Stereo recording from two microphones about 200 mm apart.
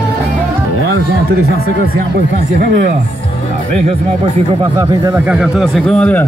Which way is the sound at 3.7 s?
30° right (ahead or behind).